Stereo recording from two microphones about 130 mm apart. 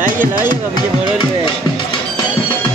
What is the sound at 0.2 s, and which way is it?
Speech, 15° right (ahead or behind).